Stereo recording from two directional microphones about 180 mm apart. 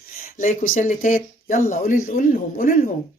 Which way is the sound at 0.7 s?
45° left (ahead or behind).